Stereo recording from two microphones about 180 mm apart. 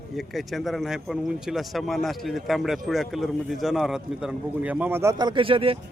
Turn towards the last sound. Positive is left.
turn(degrees=-30)  # may be behind; listen again after turning